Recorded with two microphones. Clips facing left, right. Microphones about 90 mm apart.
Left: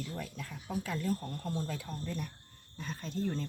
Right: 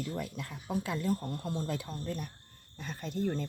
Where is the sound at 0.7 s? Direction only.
20° right (ahead or behind).